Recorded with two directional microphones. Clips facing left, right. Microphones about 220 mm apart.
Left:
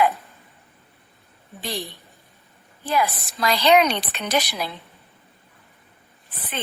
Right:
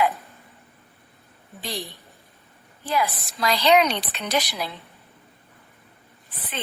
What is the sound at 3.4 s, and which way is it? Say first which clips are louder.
Speech: left 1 dB; 55° left (ahead or behind).